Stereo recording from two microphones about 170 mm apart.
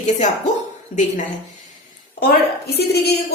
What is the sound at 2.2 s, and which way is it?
Speech, 70° left (ahead or behind).